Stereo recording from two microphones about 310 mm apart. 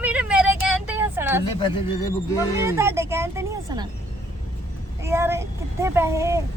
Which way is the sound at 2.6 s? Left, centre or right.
Centre.